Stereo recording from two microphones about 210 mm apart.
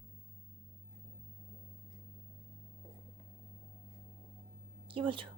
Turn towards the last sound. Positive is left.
turn(degrees=-25)  # may be behind; listen again after turning